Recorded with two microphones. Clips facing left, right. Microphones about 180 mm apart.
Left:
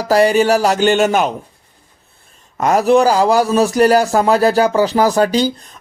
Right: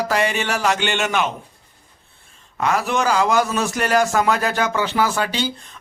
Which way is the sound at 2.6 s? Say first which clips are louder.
Left 9 dB; 40° left (ahead or behind).